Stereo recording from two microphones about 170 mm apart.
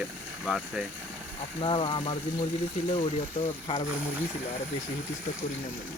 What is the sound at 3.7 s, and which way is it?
Speech, 30° left (ahead or behind).